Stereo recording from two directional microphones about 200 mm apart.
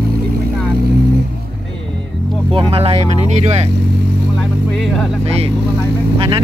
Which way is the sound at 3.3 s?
35° right (ahead or behind).